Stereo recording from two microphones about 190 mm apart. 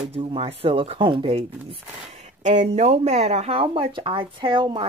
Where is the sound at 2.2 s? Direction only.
40° right (ahead or behind).